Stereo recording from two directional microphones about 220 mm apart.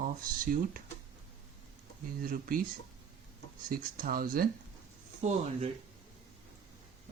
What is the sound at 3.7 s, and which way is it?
Speech, 40° right (ahead or behind).